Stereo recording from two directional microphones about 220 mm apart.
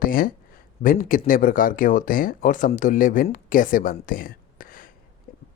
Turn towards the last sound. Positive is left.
turn(degrees=40)  # may be behind; listen again after turning